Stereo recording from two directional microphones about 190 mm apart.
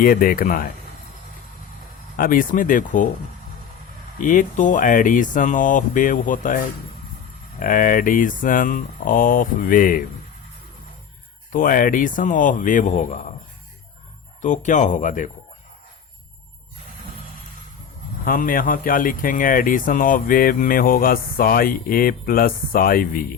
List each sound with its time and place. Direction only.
0.0 s speech: 50° left (ahead or behind)
2.1 s speech: 45° left (ahead or behind)
4.2 s speech: 45° left (ahead or behind)
11.5 s speech: 45° left (ahead or behind)
14.4 s speech: 40° left (ahead or behind)
18.3 s speech: 45° left (ahead or behind)